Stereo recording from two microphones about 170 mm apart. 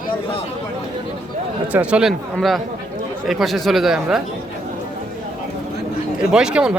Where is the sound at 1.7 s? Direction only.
5° right (ahead or behind).